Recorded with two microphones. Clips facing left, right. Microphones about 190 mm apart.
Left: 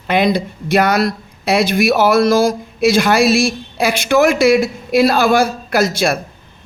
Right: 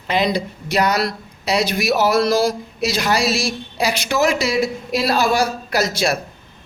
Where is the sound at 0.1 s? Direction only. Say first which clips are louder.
Left 4 dB; 55° left (ahead or behind).